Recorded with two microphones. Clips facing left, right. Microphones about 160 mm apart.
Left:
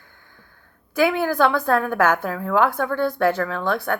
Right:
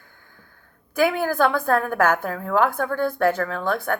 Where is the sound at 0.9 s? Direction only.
45° right (ahead or behind).